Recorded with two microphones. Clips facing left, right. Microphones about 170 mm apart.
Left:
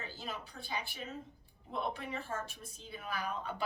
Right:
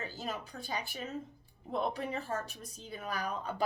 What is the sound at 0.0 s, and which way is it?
A woman's voice, 45° right (ahead or behind).